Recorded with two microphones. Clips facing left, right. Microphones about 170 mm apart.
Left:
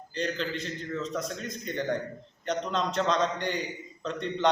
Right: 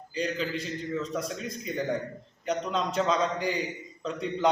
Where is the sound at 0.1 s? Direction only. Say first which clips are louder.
Right 1 dB; 5° right (ahead or behind).